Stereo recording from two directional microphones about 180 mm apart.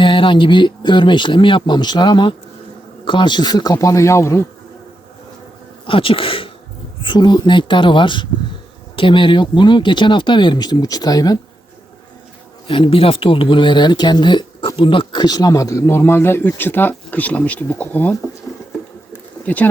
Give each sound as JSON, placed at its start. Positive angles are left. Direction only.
{"t": 0.0, "sound": "speech", "side_deg": 30}
{"t": 5.8, "sound": "speech", "side_deg": 30}
{"t": 12.6, "sound": "speech", "side_deg": 30}
{"t": 19.5, "sound": "speech", "side_deg": 10}